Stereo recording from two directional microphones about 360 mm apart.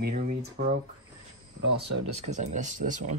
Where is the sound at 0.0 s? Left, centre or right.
Right.